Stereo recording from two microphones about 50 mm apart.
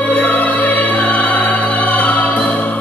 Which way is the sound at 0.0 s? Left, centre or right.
Left.